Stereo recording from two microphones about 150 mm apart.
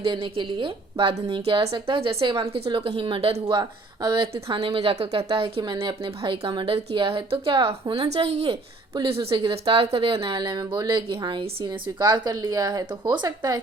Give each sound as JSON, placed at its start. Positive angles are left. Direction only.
{"t": 0.0, "sound": "a woman's voice", "side_deg": -35}